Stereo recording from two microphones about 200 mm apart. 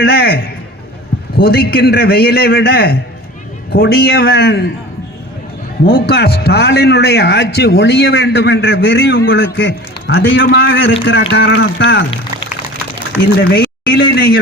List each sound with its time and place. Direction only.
0.0 s a man's voice: 50° left (ahead or behind)
6.1 s a man's voice: 55° left (ahead or behind)
13.5 s speech: 50° left (ahead or behind)